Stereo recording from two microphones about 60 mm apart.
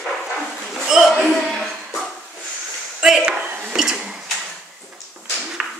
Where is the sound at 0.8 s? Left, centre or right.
Centre.